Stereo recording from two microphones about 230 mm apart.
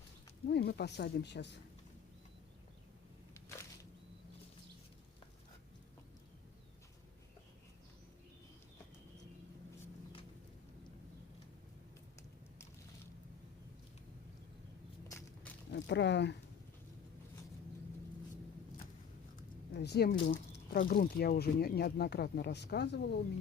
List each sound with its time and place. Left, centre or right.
0.4 s speech: left
15.0 s walk: centre
15.7 s speech: left
19.7 s a woman's voice: left